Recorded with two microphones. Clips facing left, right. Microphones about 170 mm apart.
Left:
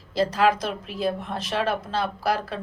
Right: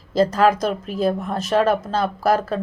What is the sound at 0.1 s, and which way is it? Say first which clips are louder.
A woman's voice: right 5 dB; 45° right (ahead or behind).